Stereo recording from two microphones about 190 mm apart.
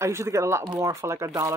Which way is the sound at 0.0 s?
15° right (ahead or behind).